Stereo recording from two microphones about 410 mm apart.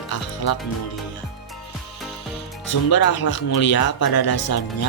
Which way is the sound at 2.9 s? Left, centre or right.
Left.